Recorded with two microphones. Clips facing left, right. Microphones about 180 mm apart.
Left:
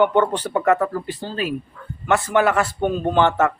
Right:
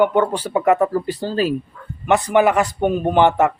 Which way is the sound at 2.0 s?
20° right (ahead or behind).